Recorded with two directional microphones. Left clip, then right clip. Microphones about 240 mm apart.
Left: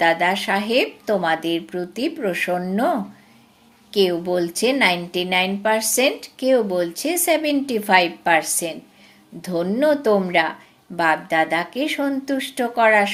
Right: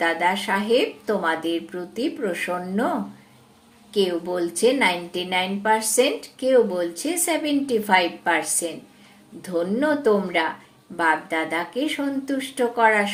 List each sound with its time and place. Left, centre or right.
0.0 s a woman's voice: left
3.9 s a woman's voice: left